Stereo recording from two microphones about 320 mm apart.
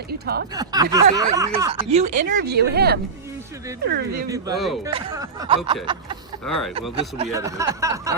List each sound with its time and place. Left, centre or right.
0.1 s speech: right
0.5 s speech: centre; by 3.0 s right
4.5 s speech: centre
4.9 s speech: centre
6.4 s speech: centre
7.2 s speech: centre